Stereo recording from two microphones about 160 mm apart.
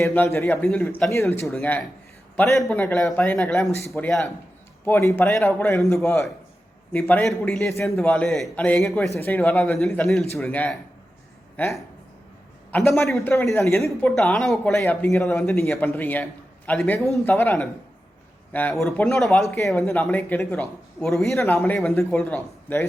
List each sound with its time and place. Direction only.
0.0 s speech: 15° left (ahead or behind)
1.5 s speech: 5° left (ahead or behind)
7.1 s speech: 10° left (ahead or behind)
13.2 s speech: 15° left (ahead or behind)
14.2 s speech: 5° left (ahead or behind)
14.8 s speech: 15° left (ahead or behind)
15.6 s speech: 5° left (ahead or behind)
19.5 s speech: 15° left (ahead or behind)